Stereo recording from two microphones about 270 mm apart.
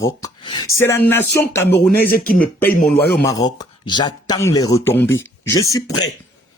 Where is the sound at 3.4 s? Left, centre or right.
Centre.